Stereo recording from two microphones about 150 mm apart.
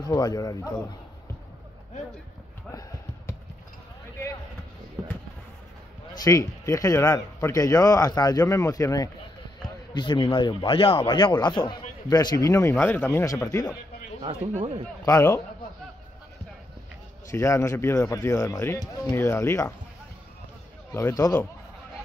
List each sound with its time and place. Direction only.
0.0 s speech: 25° left (ahead or behind)
6.1 s a man's voice: 25° left (ahead or behind)
14.2 s speech: 40° right (ahead or behind)
15.0 s speech: 20° left (ahead or behind)
17.3 s speech: 20° left (ahead or behind)
20.9 s speech: 20° left (ahead or behind)